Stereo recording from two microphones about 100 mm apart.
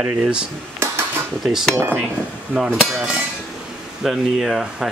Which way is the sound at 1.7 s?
25° right (ahead or behind).